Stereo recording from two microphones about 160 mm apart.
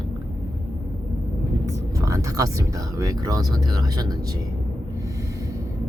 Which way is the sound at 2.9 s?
20° right (ahead or behind).